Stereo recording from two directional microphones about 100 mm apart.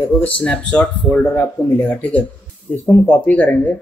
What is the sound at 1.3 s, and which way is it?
Speech, 25° left (ahead or behind).